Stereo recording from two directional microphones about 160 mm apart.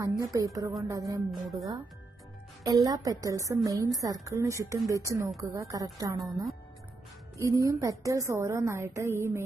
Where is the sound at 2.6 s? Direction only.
20° right (ahead or behind).